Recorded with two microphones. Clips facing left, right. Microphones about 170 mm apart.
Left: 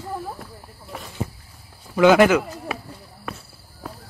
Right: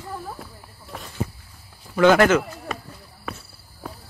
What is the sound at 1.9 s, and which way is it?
Speech, 10° left (ahead or behind).